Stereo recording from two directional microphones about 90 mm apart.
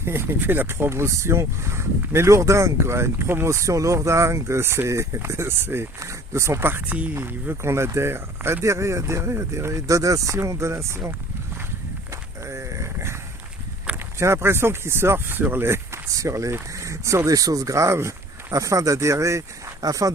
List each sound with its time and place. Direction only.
0.0 s speech: 25° right (ahead or behind)
12.1 s a sound: 30° right (ahead or behind)
14.2 s speech: 30° right (ahead or behind)